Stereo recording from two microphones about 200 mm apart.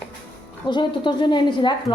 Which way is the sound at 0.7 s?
25° left (ahead or behind).